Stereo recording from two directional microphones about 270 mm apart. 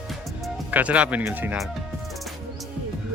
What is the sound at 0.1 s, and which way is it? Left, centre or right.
Music, centre.